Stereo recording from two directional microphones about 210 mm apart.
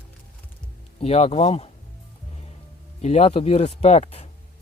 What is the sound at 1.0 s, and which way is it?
Speech, 30° left (ahead or behind).